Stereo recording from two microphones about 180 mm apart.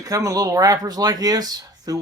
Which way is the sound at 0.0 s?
20° right (ahead or behind).